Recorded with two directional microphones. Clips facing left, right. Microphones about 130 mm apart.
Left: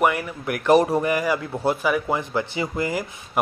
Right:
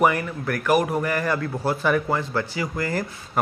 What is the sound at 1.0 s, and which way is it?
Speech, 15° left (ahead or behind).